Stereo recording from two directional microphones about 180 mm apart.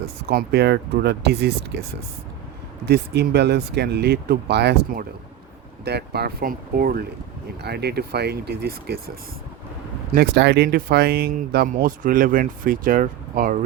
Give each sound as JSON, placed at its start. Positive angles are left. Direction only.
{"t": 0.3, "sound": "speech", "side_deg": -60}
{"t": 2.8, "sound": "speech", "side_deg": -65}
{"t": 7.6, "sound": "speech", "side_deg": -65}
{"t": 10.2, "sound": "speech", "side_deg": -70}